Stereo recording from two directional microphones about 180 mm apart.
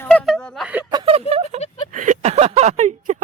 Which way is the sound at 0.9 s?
25° right (ahead or behind).